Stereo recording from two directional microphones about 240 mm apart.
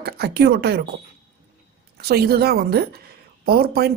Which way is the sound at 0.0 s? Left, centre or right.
Right.